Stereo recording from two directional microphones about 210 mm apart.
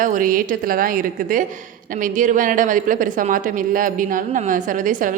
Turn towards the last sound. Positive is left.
turn(degrees=-40)  # may be behind; listen again after turning